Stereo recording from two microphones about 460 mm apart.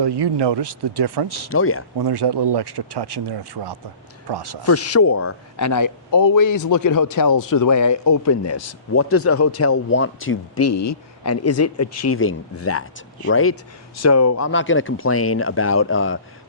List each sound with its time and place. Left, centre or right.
0.0 s speech: right
1.5 s speech: left
2.0 s speech: right
4.6 s a man's voice: left